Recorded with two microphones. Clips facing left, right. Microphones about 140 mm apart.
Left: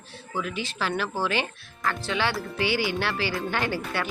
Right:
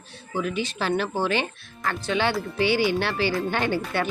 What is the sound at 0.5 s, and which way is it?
Speech, 20° right (ahead or behind).